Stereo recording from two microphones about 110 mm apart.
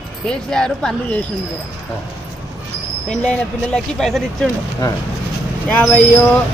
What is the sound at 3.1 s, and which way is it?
Speech, 5° left (ahead or behind).